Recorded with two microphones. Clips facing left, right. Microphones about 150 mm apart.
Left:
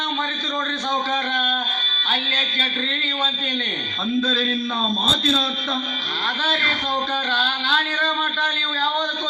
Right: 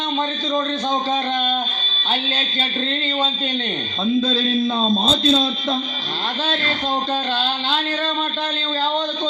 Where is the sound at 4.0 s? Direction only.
25° right (ahead or behind).